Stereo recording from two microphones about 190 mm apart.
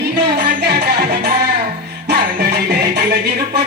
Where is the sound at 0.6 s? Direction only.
55° right (ahead or behind).